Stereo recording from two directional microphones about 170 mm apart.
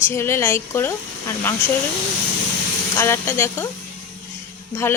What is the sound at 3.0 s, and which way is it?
Speech, 15° left (ahead or behind).